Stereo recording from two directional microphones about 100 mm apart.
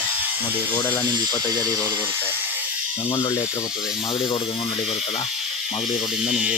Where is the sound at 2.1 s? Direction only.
20° right (ahead or behind).